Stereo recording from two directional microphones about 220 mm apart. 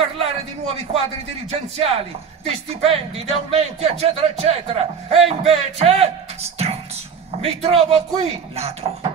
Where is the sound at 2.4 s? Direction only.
25° right (ahead or behind).